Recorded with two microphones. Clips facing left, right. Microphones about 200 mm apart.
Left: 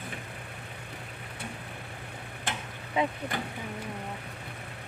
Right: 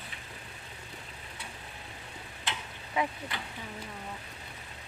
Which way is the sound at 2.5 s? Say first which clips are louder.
Left 3 dB; 50° left (ahead or behind).